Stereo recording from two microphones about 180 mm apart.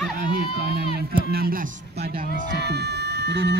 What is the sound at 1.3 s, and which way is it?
A child's voice, 55° right (ahead or behind).